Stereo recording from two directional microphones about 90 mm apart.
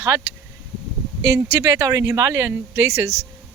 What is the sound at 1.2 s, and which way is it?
Speech, 35° right (ahead or behind).